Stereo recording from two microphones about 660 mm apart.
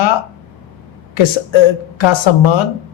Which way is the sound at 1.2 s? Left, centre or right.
Left.